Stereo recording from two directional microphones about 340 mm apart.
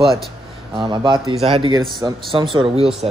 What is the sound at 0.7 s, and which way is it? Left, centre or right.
Speech, centre.